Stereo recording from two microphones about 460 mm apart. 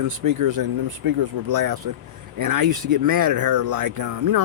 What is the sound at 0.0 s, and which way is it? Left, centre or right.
Speech, right.